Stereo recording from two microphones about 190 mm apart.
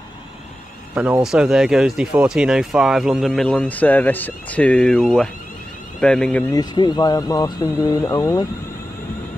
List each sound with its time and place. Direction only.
0.9 s speech: 5° right (ahead or behind)
6.5 s speech: 20° left (ahead or behind)